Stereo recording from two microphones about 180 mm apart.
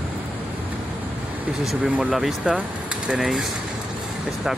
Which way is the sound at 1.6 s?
5° right (ahead or behind).